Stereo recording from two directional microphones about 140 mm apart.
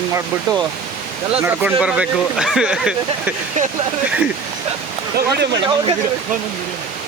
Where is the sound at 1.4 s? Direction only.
10° right (ahead or behind).